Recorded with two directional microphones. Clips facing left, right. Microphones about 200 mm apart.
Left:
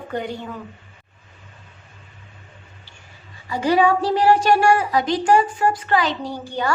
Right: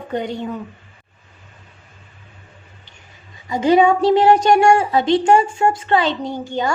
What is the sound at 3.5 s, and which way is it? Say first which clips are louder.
A woman's voice: right 4 dB; 20° right (ahead or behind).